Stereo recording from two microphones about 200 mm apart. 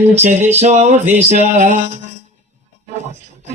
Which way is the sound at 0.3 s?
35° right (ahead or behind).